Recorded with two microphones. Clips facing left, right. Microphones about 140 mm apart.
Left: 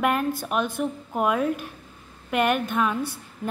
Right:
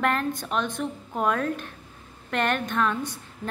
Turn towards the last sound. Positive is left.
turn(degrees=10)  # may be behind; listen again after turning